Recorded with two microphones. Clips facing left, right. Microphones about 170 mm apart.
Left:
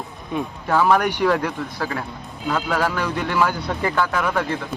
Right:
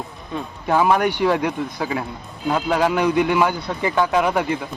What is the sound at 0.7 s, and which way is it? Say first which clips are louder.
Speech: right 1 dB; 15° right (ahead or behind).